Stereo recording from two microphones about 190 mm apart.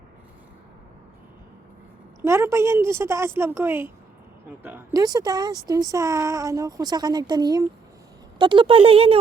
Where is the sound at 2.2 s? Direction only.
15° right (ahead or behind).